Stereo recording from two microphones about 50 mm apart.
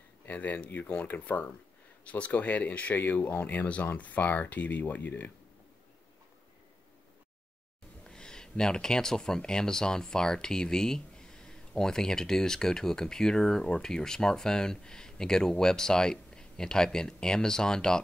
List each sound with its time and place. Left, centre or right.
0.3 s speech: left
0.7 s speech: left
1.0 s speech: left
2.0 s speech: left
8.0 s speech: centre